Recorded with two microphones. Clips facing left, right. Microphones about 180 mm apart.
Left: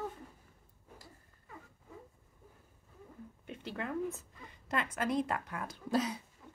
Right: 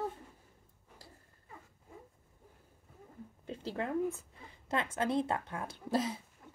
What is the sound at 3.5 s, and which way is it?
A woman's voice, 30° right (ahead or behind).